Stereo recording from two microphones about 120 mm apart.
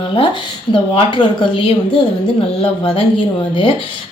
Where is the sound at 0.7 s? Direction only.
40° left (ahead or behind).